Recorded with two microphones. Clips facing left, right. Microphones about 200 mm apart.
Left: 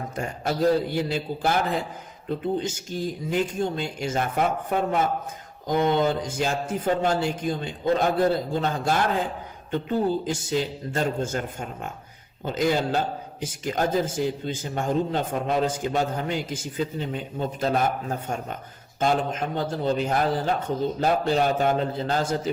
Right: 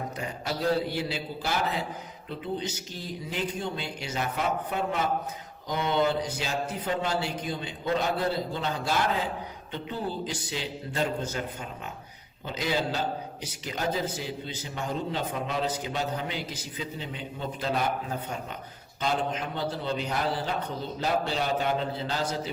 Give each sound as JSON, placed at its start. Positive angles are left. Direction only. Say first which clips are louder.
{"t": 0.9, "sound": "a man's voice", "louder": "left 5 dB", "side_deg": 50}